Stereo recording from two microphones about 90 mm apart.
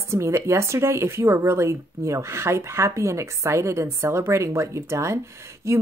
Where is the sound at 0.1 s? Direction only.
30° right (ahead or behind).